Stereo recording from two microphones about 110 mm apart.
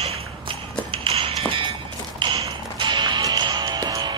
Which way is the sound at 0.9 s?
55° right (ahead or behind).